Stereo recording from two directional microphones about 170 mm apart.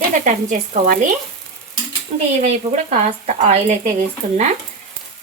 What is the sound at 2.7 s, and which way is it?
Speech, 45° right (ahead or behind).